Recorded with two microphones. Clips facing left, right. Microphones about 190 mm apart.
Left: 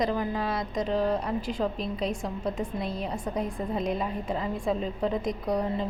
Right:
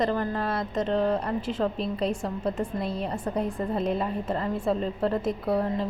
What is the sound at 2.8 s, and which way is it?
Speech, 35° right (ahead or behind).